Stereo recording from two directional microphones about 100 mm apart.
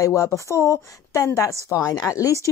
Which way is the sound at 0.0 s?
35° left (ahead or behind).